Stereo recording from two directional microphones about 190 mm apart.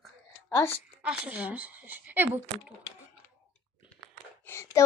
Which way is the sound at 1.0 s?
5° right (ahead or behind).